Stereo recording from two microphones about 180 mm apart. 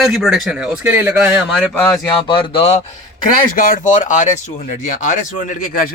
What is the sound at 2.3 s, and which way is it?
Speech, 30° left (ahead or behind).